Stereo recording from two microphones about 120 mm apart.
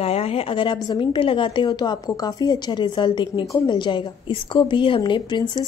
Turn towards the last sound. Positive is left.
turn(degrees=40)  # may be behind; listen again after turning